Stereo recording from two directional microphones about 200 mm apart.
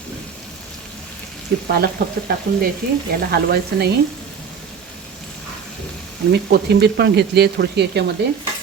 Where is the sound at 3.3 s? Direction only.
55° right (ahead or behind).